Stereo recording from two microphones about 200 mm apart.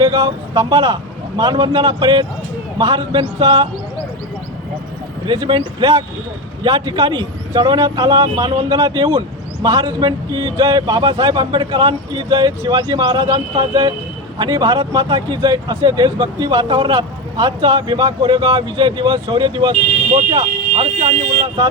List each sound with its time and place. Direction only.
0.0 s speech: 20° right (ahead or behind)
5.2 s speech: 25° right (ahead or behind)